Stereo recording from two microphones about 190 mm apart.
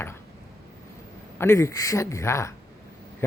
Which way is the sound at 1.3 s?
15° left (ahead or behind).